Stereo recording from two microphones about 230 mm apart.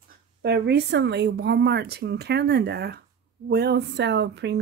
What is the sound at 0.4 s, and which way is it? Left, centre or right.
Speech, right.